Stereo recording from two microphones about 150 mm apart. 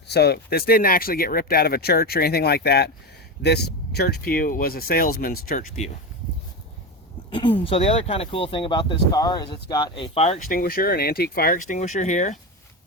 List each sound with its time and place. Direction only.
0.1 s speech: 90° left; by 5.6 s 75° left (ahead or behind)
7.3 s speech: 35° left (ahead or behind)
10.2 s speech: 45° left (ahead or behind)
10.5 s speech: 75° left (ahead or behind); by 12.4 s 55° left (ahead or behind)